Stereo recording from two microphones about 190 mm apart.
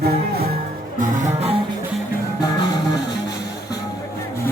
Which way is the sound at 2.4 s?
20° left (ahead or behind).